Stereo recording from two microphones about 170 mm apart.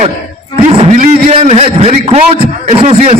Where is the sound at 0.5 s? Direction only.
35° right (ahead or behind).